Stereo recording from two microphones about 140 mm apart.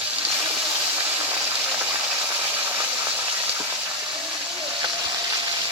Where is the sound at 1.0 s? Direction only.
15° right (ahead or behind).